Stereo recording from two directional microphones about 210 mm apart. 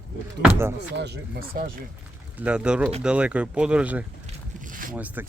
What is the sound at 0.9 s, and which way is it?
Speech, 55° right (ahead or behind).